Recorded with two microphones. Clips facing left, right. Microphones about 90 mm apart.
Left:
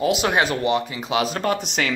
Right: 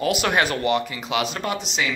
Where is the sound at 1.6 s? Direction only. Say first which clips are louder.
Left 1 dB; 55° left (ahead or behind).